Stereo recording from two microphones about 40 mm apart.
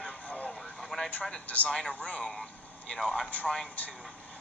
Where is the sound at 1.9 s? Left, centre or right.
Left.